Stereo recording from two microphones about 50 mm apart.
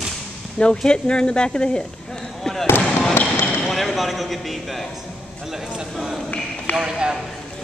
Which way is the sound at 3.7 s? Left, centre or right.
Centre.